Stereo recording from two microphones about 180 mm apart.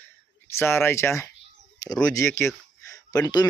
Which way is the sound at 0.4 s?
15° left (ahead or behind).